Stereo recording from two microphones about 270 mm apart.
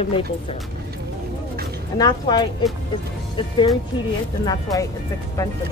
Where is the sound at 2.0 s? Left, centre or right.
Centre.